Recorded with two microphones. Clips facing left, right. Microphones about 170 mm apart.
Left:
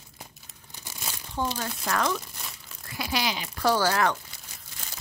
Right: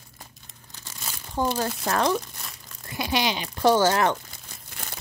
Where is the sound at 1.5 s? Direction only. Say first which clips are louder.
Right 4 dB; 30° right (ahead or behind).